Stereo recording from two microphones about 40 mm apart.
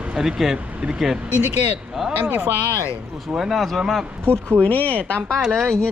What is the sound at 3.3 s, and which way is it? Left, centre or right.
Speech, centre.